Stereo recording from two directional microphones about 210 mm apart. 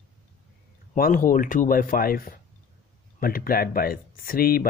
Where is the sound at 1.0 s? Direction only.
40° left (ahead or behind).